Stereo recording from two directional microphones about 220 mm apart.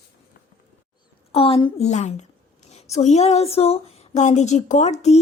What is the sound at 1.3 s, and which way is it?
A woman's voice, 25° left (ahead or behind).